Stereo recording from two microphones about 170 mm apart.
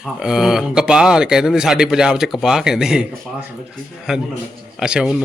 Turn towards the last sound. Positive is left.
turn(degrees=-5)  # may be behind; listen again after turning